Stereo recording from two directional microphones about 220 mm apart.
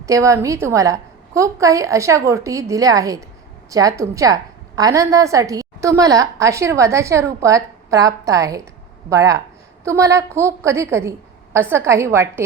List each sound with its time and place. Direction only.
0.0 s a woman's voice: 15° right (ahead or behind)